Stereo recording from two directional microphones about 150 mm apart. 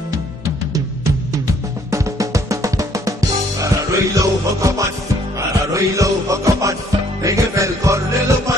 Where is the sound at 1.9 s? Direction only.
20° right (ahead or behind).